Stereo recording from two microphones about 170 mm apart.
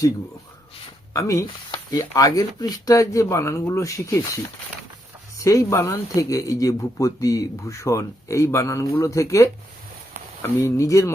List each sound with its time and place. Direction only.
1.1 s speech: 15° left (ahead or behind)
5.4 s speech: 20° left (ahead or behind)